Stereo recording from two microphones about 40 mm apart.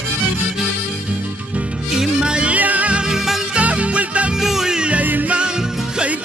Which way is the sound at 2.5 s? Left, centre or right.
Right.